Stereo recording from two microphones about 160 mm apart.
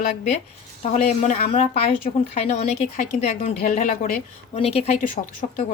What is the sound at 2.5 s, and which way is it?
Speech, 45° left (ahead or behind).